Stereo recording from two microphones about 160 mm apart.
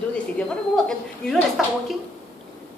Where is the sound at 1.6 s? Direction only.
Centre (ahead or behind).